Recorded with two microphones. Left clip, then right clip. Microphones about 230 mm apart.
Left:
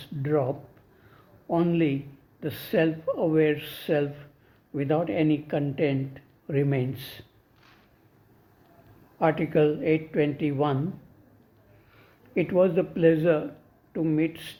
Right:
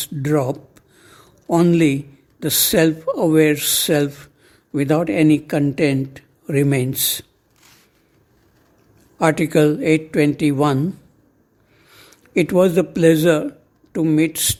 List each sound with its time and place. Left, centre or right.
0.0 s speech: right
1.1 s a sound: right
2.4 s speech: right
9.1 s speech: right
11.9 s a man's voice: right